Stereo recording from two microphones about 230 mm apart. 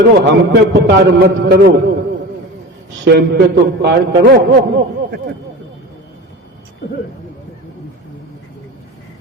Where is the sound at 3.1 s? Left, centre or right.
Right.